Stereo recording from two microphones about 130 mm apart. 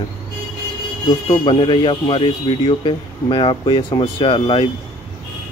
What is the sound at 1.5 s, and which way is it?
Speech, 40° left (ahead or behind).